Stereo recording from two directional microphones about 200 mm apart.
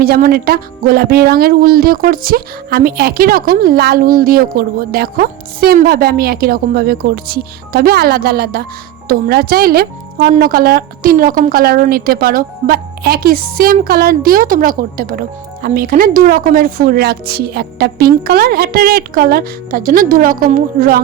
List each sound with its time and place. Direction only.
0.0 s speech: 50° right (ahead or behind)